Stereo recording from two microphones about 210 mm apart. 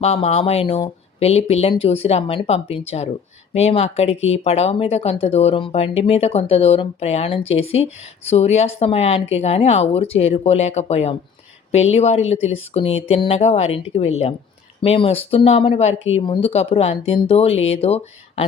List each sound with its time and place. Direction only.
0.0 s speech: 30° left (ahead or behind)